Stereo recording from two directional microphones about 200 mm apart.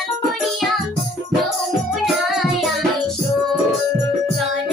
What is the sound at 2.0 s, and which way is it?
Music, centre (ahead or behind).